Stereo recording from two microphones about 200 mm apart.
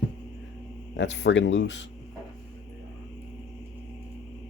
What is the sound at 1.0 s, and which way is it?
Speech, 60° left (ahead or behind).